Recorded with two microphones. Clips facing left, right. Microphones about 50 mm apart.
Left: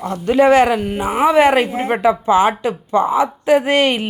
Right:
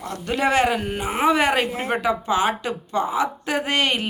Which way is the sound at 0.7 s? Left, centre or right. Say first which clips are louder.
Left 5 dB; centre.